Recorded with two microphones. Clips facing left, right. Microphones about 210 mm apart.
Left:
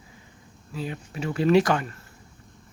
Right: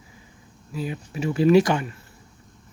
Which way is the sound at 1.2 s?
25° right (ahead or behind).